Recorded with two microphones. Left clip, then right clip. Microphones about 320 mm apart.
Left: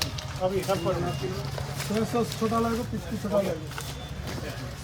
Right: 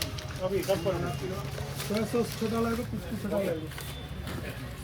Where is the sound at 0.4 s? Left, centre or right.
Left.